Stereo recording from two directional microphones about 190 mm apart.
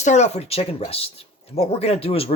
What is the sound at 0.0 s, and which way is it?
Speech, 35° left (ahead or behind).